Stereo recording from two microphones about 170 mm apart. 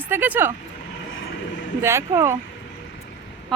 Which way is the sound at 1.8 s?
15° right (ahead or behind).